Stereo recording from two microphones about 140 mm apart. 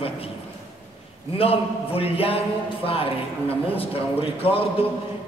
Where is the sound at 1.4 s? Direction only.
45° left (ahead or behind).